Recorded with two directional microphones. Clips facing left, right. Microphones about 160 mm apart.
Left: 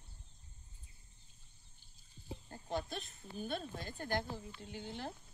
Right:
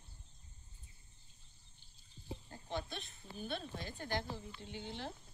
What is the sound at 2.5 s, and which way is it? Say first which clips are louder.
Speech: left 3 dB; 40° left (ahead or behind).